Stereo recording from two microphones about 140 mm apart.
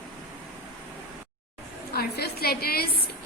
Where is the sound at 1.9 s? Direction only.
90° left.